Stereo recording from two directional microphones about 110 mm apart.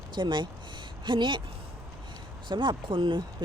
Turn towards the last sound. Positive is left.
turn(degrees=-45)  # may be behind; listen again after turning